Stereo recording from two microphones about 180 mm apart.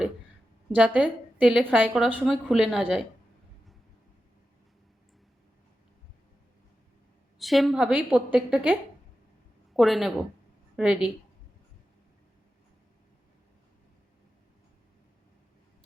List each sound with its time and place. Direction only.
0.7 s a woman's voice: 10° right (ahead or behind)
7.3 s a woman's voice: centre (ahead or behind)